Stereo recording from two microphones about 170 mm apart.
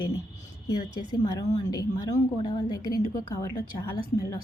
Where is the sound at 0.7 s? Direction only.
25° left (ahead or behind).